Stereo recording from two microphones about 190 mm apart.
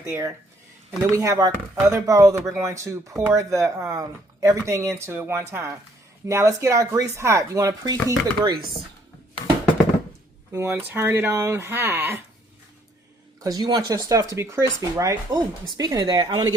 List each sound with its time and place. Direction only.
0.0 s speech: 15° right (ahead or behind)
10.5 s speech: 10° right (ahead or behind)
13.4 s speech: 20° right (ahead or behind)